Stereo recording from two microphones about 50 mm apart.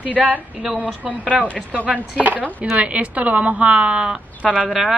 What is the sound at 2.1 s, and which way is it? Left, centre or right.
Speech, right.